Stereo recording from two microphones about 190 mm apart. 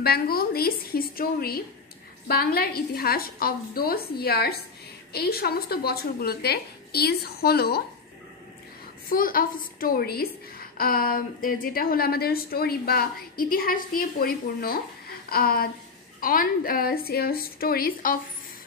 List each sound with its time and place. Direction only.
0.0 s a woman's voice: 55° left (ahead or behind)
9.1 s a woman's voice: 50° left (ahead or behind)